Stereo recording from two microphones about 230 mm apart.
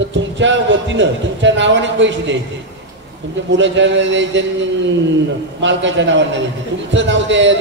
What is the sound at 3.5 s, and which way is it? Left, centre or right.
A man's voice, right.